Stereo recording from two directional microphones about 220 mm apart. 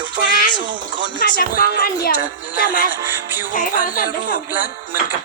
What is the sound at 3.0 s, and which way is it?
Music, 10° right (ahead or behind).